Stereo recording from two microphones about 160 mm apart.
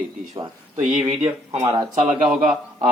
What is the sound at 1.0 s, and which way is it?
Speech, 35° right (ahead or behind).